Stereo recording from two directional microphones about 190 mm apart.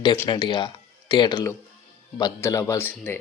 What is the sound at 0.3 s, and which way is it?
Speech, 25° left (ahead or behind).